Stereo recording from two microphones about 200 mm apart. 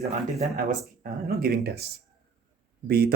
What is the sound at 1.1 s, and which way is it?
Speech, 50° right (ahead or behind).